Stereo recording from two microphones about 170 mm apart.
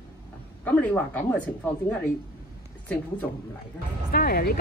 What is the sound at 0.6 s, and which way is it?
Speech, 10° left (ahead or behind).